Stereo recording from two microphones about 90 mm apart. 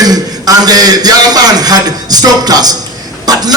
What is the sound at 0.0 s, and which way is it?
A man's voice, 45° right (ahead or behind).